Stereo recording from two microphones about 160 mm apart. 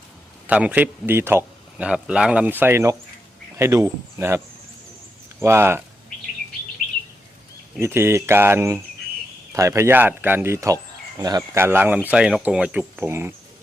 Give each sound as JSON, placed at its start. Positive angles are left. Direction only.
{"t": 0.4, "sound": "a man's voice", "side_deg": -10}
{"t": 5.4, "sound": "speech", "side_deg": -15}
{"t": 7.8, "sound": "speech", "side_deg": -15}